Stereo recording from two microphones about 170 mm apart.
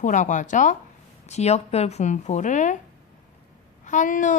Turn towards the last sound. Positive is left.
turn(degrees=50)  # may be behind; listen again after turning